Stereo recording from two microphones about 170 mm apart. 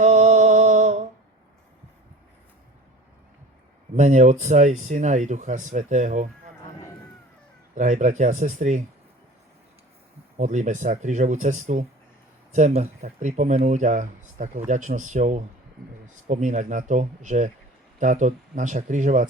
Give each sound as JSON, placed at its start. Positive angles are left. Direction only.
{"t": 0.0, "sound": "music", "side_deg": -45}
{"t": 3.9, "sound": "speech", "side_deg": -45}
{"t": 7.8, "sound": "speech", "side_deg": -45}
{"t": 10.3, "sound": "speech", "side_deg": -45}